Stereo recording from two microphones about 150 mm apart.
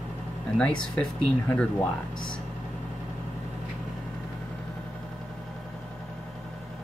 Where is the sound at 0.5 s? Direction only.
10° left (ahead or behind).